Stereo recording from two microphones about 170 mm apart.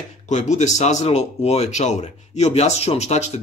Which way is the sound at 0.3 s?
45° left (ahead or behind).